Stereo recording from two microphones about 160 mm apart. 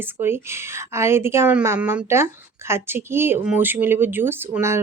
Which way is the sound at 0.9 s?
15° right (ahead or behind).